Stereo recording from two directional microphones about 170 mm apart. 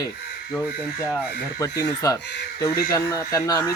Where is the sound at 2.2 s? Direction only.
85° left.